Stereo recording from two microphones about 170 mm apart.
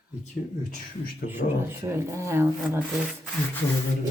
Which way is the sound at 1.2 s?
60° left (ahead or behind).